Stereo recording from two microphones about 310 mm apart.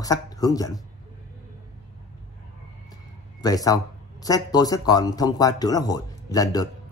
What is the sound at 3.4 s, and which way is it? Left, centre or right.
Speech, centre.